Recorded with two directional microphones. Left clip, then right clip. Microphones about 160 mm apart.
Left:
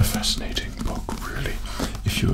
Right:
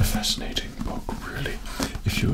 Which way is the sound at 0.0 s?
40° left (ahead or behind).